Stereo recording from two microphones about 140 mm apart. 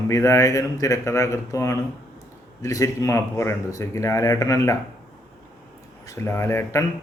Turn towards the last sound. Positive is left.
turn(degrees=20)  # may be behind; listen again after turning